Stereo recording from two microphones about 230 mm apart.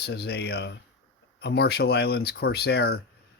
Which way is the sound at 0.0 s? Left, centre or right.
Left.